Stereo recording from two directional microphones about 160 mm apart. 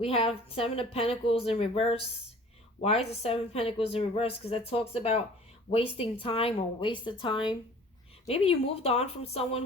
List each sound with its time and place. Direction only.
0.0 s speech: 40° left (ahead or behind)